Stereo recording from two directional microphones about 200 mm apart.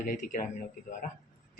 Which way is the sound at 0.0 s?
40° left (ahead or behind).